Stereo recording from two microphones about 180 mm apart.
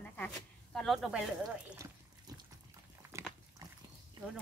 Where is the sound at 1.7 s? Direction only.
15° right (ahead or behind).